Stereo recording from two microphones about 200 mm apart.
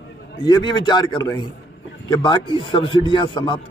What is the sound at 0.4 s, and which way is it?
Speech, 20° left (ahead or behind).